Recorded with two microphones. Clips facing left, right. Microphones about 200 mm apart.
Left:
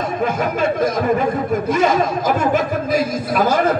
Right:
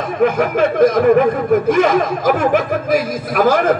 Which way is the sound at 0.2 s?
60° right (ahead or behind).